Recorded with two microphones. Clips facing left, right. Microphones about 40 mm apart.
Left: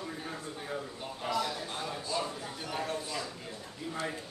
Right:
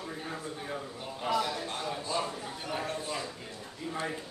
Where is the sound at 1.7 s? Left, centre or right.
Centre.